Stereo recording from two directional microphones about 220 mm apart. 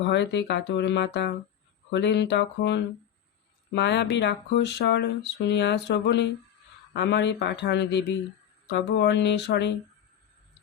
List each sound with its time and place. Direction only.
0.0 s speech: 50° left (ahead or behind)